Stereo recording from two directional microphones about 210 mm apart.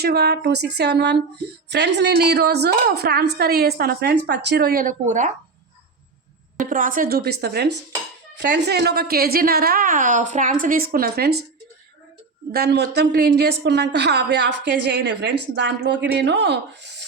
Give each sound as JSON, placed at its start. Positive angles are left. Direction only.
{"t": 0.0, "sound": "a woman's voice", "side_deg": -50}
{"t": 6.6, "sound": "a woman's voice", "side_deg": -40}
{"t": 12.5, "sound": "a woman's voice", "side_deg": -50}